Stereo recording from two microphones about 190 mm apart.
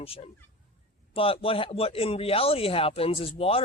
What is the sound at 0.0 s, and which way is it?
A man's voice, 30° left (ahead or behind).